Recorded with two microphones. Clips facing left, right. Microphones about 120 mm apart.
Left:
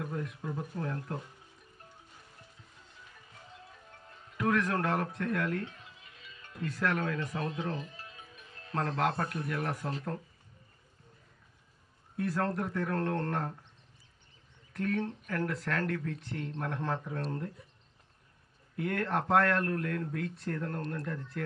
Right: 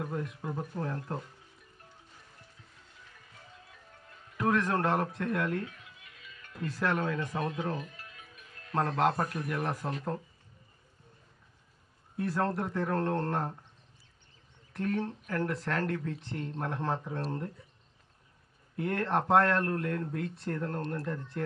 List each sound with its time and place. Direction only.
0.0 s speech: 35° right (ahead or behind)
4.4 s speech: 30° right (ahead or behind)
5.6 s music: 30° left (ahead or behind)
6.6 s speech: 25° right (ahead or behind)
7.8 s music: 25° left (ahead or behind)
8.7 s speech: 30° right (ahead or behind)
12.1 s speech: 25° right (ahead or behind)
14.7 s speech: 30° right (ahead or behind)
18.8 s speech: 30° right (ahead or behind)